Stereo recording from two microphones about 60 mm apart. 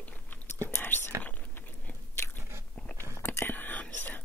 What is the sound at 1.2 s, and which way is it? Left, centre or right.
Biting, left.